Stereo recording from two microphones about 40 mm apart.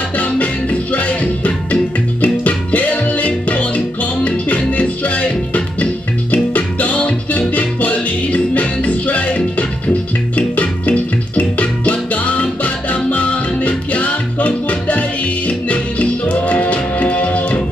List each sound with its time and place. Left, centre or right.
0.2 s music: left